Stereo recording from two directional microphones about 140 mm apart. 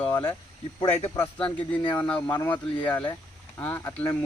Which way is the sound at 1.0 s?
20° left (ahead or behind).